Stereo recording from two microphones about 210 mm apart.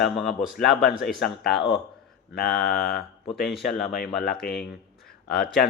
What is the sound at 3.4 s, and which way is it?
Speech, centre (ahead or behind).